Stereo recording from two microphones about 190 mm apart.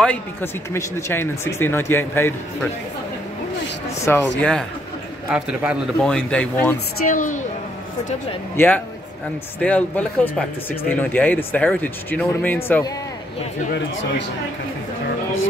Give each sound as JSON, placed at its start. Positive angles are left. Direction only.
{"t": 0.0, "sound": "speech", "side_deg": 10}
{"t": 4.1, "sound": "a man's voice", "side_deg": 10}
{"t": 6.0, "sound": "speech", "side_deg": 5}
{"t": 7.1, "sound": "a woman's voice", "side_deg": 45}
{"t": 8.5, "sound": "speech", "side_deg": 10}
{"t": 13.7, "sound": "speech", "side_deg": 65}